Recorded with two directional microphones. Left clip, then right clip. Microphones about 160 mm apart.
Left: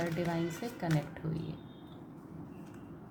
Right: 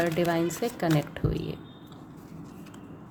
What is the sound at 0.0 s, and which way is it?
Speech, 45° right (ahead or behind).